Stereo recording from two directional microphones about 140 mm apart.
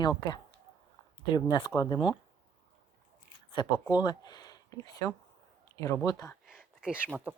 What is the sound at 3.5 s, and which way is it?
Speech, 35° left (ahead or behind).